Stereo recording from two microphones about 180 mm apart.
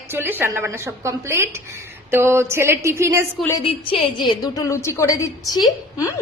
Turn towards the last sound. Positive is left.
turn(degrees=20)  # may be behind; listen again after turning